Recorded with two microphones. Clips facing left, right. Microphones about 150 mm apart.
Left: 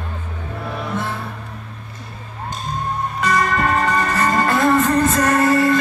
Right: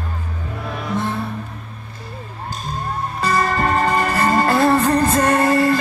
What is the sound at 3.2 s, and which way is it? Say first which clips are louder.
Music: even; 30° right (ahead or behind).